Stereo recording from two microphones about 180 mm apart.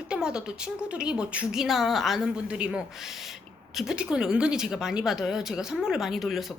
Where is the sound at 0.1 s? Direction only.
5° right (ahead or behind).